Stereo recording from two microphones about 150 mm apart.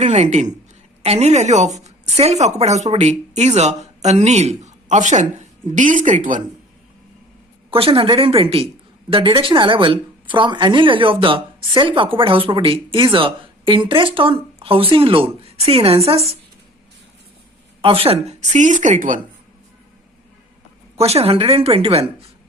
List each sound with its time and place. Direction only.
0.0 s a woman's voice: 50° right (ahead or behind)
7.7 s a woman's voice: 40° right (ahead or behind)
17.8 s a woman's voice: 40° right (ahead or behind); by 19.2 s 60° right (ahead or behind)
20.9 s a woman's voice: 45° right (ahead or behind)